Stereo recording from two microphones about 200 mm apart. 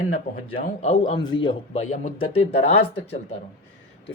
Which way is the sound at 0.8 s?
35° left (ahead or behind).